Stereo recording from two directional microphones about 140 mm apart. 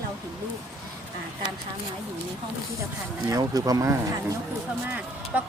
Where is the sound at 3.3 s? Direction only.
25° right (ahead or behind).